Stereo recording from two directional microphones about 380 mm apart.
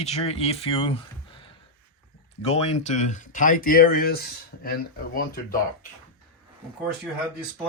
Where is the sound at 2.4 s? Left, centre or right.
Centre.